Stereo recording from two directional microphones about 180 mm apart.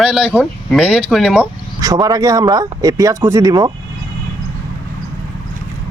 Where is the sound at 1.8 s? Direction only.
20° right (ahead or behind).